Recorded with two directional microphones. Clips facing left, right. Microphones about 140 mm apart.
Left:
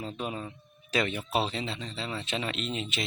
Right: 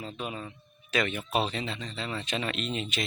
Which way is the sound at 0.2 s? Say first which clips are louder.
Left 2 dB; 35° left (ahead or behind).